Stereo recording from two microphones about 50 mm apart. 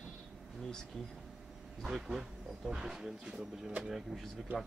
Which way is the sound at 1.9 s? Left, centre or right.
Centre.